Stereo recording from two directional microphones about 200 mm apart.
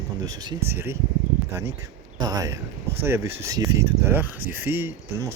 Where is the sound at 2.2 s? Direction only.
20° right (ahead or behind).